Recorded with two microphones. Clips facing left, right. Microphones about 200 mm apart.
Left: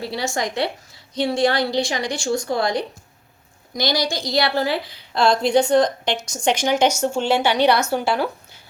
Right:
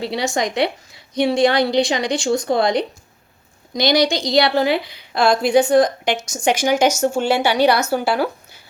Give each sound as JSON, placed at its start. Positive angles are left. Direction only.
{"t": 0.0, "sound": "a woman's voice", "side_deg": -20}